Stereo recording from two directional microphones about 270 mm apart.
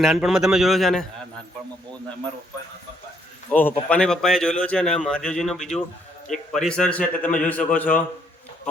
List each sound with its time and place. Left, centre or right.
0.0 s a man's voice: centre
3.5 s a man's voice: centre